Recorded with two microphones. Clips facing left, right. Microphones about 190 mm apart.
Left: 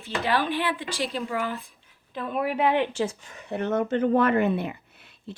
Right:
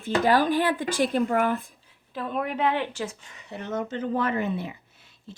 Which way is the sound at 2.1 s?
Centre (ahead or behind).